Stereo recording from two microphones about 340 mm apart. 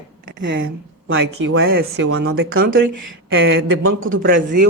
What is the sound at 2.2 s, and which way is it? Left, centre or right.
Speech, right.